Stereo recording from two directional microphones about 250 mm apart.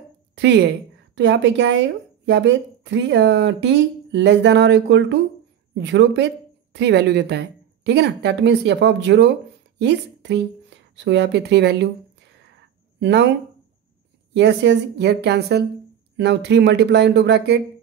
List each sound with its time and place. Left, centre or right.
0.4 s a woman's voice: right
13.0 s speech: right
14.3 s speech: right